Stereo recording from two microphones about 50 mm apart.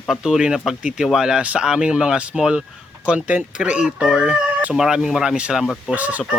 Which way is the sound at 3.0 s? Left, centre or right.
Right.